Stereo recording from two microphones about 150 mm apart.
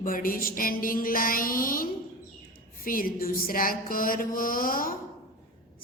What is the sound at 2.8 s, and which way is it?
A woman's voice, 70° left (ahead or behind).